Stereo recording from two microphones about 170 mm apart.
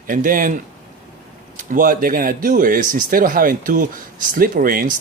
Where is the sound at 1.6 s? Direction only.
55° right (ahead or behind).